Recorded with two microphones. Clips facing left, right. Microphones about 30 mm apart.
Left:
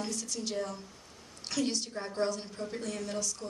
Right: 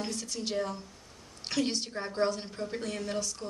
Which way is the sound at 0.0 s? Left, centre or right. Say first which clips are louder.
Right 1 dB; right.